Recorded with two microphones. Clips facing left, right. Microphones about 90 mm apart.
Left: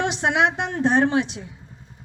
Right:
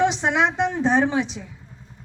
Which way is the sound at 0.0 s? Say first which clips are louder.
Right 1 dB; 60° left (ahead or behind).